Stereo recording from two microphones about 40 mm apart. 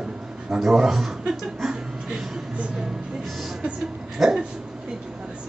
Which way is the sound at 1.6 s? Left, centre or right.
Centre.